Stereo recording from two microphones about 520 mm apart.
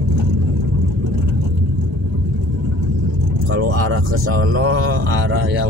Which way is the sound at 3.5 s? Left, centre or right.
Right.